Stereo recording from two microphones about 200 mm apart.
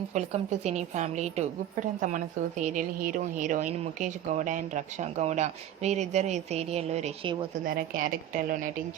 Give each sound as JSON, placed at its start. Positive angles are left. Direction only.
{"t": 0.1, "sound": "a woman's voice", "side_deg": -35}